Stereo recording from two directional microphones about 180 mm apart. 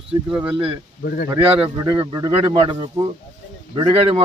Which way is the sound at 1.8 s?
20° right (ahead or behind).